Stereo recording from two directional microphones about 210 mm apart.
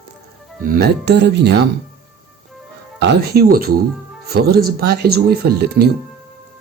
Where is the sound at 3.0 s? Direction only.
50° right (ahead or behind).